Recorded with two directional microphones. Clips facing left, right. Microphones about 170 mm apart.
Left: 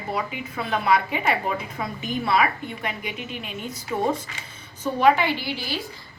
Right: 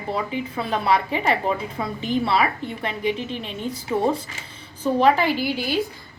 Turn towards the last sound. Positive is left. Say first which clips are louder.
# right 4 dB
turn(degrees=-45)  # may be behind; listen again after turning